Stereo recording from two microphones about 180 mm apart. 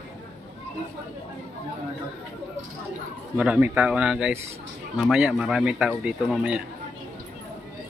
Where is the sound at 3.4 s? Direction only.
5° right (ahead or behind).